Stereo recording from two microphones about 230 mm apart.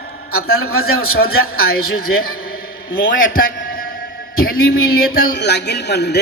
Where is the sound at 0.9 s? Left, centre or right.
Left.